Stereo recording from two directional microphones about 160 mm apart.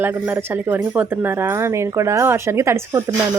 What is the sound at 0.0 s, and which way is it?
Speech, 15° right (ahead or behind).